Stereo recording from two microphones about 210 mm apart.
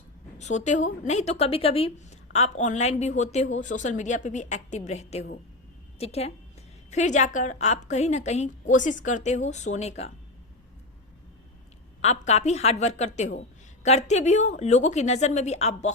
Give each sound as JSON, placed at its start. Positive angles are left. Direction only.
{"t": 0.3, "sound": "a woman's voice", "side_deg": 35}
{"t": 12.0, "sound": "a woman's voice", "side_deg": 30}